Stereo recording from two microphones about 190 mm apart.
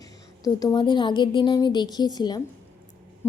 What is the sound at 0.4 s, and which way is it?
A woman's voice, 20° left (ahead or behind).